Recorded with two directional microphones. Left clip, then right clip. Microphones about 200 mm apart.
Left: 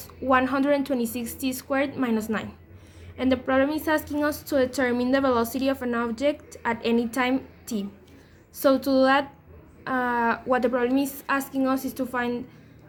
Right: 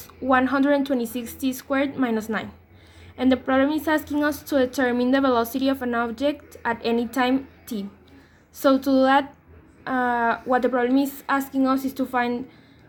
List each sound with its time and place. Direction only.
0.3 s a woman's voice: 15° right (ahead or behind)